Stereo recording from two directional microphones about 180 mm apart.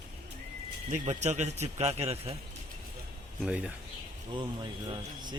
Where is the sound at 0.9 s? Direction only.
40° right (ahead or behind).